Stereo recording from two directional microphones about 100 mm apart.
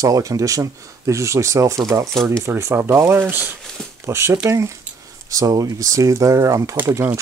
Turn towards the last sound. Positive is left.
turn(degrees=-25)  # may be behind; listen again after turning